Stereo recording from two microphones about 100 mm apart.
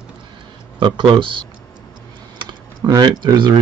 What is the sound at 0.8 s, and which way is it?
Speech, 50° right (ahead or behind).